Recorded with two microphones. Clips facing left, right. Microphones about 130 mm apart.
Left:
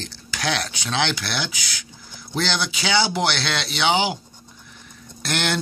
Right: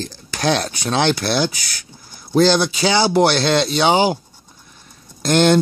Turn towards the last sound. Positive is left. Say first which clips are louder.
# right 11 dB
turn(degrees=-40)  # may be behind; listen again after turning